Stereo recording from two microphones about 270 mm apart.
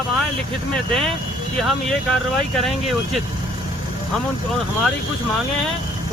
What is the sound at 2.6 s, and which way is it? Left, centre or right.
Speech, centre.